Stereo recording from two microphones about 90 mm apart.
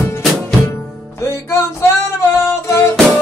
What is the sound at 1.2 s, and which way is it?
Music, 30° left (ahead or behind).